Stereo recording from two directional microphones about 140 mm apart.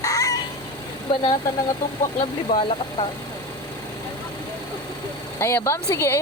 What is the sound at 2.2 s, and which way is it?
Speech, 45° left (ahead or behind).